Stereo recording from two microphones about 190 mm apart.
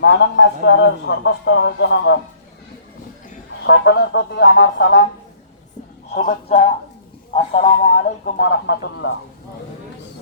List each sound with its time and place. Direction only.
0.0 s a man's voice: 65° left (ahead or behind)
3.6 s a man's voice: 60° left (ahead or behind)
6.1 s speech: 40° left (ahead or behind)
7.3 s a man's voice: 30° left (ahead or behind)
8.0 s a man's voice: 55° left (ahead or behind)